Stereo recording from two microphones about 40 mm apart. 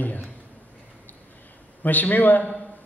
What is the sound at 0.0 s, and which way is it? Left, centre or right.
Speech, left.